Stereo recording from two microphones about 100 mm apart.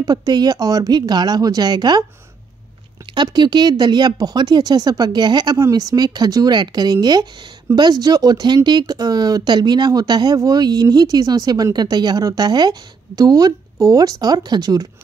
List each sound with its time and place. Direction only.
0.0 s speech: 40° right (ahead or behind)
3.2 s speech: 45° right (ahead or behind)